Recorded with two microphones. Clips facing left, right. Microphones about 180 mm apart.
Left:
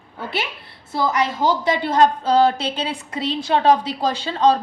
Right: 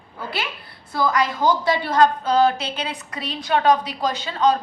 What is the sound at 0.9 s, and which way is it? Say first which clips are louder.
A woman's voice: even; 25° left (ahead or behind).